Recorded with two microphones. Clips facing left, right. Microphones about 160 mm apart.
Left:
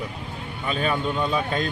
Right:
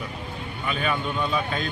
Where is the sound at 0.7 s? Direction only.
35° left (ahead or behind).